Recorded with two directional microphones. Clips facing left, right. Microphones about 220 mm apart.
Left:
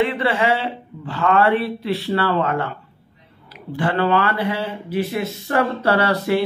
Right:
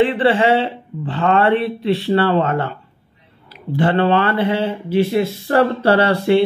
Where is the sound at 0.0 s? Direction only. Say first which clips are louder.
Right 5 dB; 30° right (ahead or behind).